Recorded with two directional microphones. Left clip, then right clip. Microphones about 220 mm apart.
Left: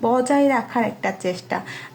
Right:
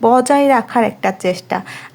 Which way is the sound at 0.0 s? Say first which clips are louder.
Right 7 dB; 45° right (ahead or behind).